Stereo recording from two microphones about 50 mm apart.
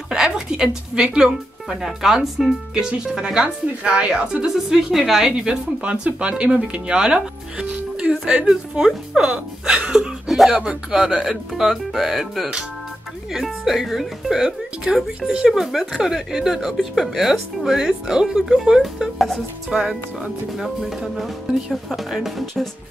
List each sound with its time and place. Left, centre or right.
0.1 s a woman's voice: centre
7.7 s music: right
8.7 s a woman's voice: centre
9.9 s speech: centre
10.5 s speech: centre
14.9 s a woman's voice: centre
15.5 s a woman's voice: centre
19.7 s speech: centre
20.5 s a woman's voice: centre